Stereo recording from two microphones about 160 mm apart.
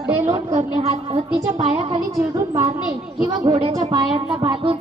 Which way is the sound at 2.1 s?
20° right (ahead or behind).